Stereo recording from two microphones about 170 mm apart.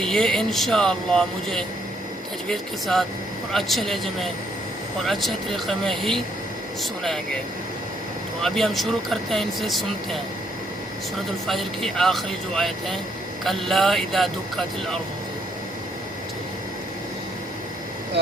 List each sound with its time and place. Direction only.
0.0 s speech: 5° left (ahead or behind)
8.4 s speech: centre (ahead or behind)
11.4 s speech: centre (ahead or behind)